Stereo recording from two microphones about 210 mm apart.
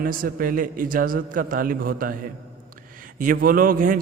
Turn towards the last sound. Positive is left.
turn(degrees=-40)  # may be behind; listen again after turning